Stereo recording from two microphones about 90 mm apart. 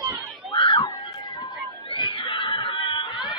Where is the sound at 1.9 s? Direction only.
60° left (ahead or behind).